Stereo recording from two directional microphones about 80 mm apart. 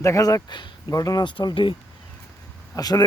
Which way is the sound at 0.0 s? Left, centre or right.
Left.